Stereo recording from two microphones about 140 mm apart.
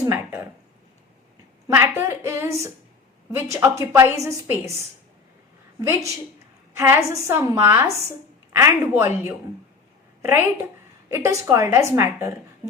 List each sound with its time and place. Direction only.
0.0 s a sound: 20° right (ahead or behind)
1.6 s a woman's voice: 15° right (ahead or behind)
5.8 s a woman's voice: 20° right (ahead or behind)
11.1 s a woman's voice: 20° right (ahead or behind)